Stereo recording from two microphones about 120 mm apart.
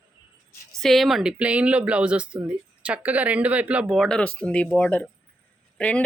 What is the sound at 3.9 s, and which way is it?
Speech, 5° left (ahead or behind).